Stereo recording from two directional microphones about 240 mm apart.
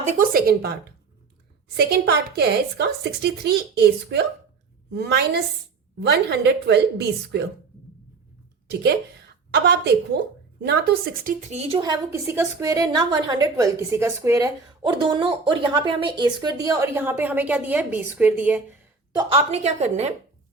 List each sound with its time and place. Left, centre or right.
0.0 s a woman's voice: right
8.6 s a woman's voice: right; by 18.8 s centre
19.1 s a woman's voice: right